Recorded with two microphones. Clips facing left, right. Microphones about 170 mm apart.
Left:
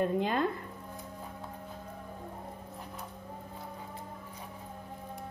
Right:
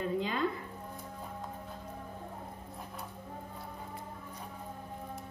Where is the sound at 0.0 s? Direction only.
55° left (ahead or behind).